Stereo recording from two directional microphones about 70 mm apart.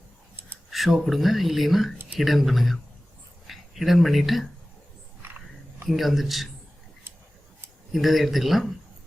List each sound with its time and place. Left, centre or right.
0.7 s speech: centre
5.2 s a sound: right
5.9 s speech: centre
7.9 s speech: centre